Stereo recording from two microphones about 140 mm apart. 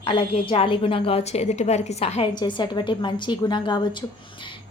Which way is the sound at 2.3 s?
35° left (ahead or behind).